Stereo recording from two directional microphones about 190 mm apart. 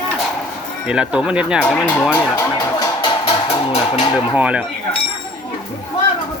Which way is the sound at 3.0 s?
25° left (ahead or behind).